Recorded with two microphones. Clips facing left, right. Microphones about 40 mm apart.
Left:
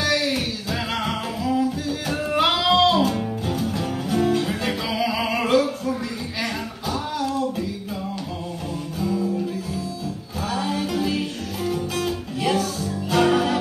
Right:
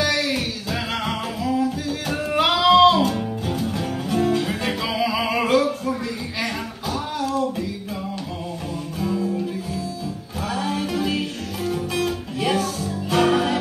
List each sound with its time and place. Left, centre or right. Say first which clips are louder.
0.0 s music: even; centre
6.4 s a sound: even; centre
9.0 s music: even; centre
10.6 s music: even; centre